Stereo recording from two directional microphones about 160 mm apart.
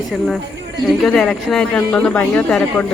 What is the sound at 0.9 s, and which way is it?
Speech, centre (ahead or behind).